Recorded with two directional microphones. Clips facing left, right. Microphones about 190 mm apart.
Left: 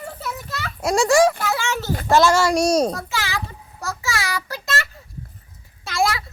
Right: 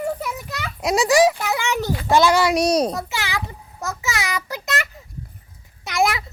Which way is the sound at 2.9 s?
20° right (ahead or behind).